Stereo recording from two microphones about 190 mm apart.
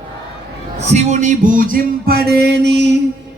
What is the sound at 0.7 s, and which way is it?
Music, 35° right (ahead or behind).